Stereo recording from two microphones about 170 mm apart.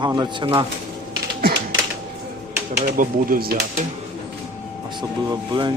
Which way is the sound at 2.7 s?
60° right (ahead or behind).